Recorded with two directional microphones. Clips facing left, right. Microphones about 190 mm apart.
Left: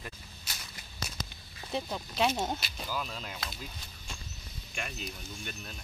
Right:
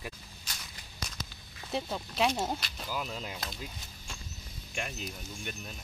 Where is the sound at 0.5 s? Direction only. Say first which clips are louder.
Even; 5° left (ahead or behind).